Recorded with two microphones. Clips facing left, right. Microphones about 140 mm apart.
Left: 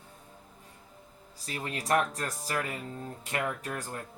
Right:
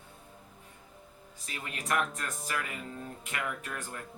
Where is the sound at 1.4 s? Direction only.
35° left (ahead or behind).